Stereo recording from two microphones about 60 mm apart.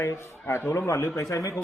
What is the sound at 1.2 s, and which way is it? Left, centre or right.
Speech, left.